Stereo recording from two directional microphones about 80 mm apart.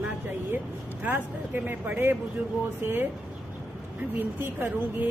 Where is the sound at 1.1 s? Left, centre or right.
Right.